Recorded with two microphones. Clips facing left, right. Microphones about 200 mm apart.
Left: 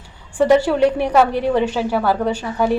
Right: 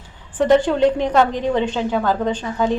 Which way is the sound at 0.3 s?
10° left (ahead or behind).